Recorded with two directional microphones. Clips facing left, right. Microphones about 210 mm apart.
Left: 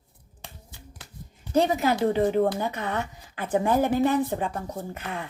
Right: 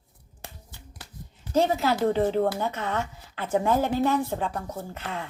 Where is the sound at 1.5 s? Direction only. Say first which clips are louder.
Left 1 dB; 15° left (ahead or behind).